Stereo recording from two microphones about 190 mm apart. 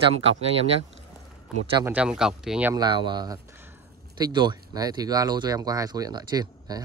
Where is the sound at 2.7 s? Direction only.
25° right (ahead or behind).